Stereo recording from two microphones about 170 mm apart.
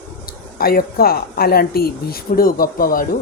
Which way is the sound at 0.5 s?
60° left (ahead or behind).